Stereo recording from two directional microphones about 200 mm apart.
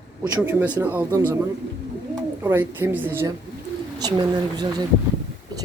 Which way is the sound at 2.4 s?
10° right (ahead or behind).